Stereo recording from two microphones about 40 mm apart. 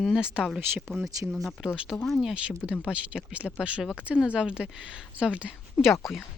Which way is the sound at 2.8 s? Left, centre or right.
Right.